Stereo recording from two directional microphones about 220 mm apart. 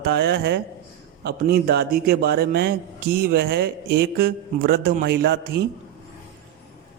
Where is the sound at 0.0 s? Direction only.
50° right (ahead or behind).